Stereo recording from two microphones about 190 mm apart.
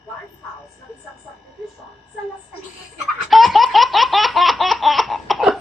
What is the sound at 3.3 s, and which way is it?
Laughter, centre (ahead or behind).